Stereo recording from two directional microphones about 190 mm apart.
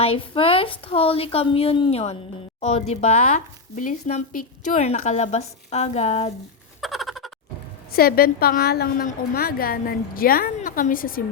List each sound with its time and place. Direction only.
0.0 s a woman's voice: 30° left (ahead or behind)
6.8 s a sound: centre (ahead or behind)
7.9 s a woman's voice: 55° left (ahead or behind)